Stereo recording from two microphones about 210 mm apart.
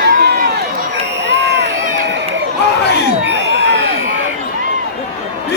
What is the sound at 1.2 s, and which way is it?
Crowd, 55° right (ahead or behind).